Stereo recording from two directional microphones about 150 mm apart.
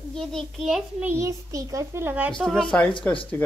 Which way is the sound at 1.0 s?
20° right (ahead or behind).